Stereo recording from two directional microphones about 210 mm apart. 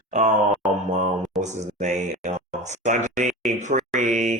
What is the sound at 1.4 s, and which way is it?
Speech, 35° right (ahead or behind).